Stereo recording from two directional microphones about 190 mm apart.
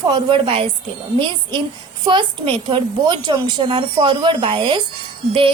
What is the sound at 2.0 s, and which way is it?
A woman's voice, 25° right (ahead or behind).